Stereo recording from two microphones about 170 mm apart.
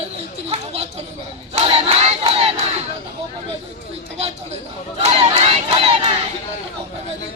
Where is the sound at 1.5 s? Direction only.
35° right (ahead or behind).